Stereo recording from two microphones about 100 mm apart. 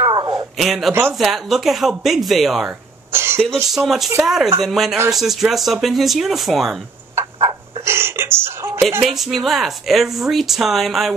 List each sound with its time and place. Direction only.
0.0 s a sound: 45° right (ahead or behind)
0.6 s speech: centre (ahead or behind)
3.1 s cough: 25° right (ahead or behind)
3.7 s speech: centre (ahead or behind)
7.2 s a sound: 25° right (ahead or behind)
9.0 s speech: centre (ahead or behind)